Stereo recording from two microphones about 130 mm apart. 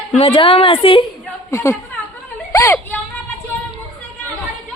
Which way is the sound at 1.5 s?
20° left (ahead or behind).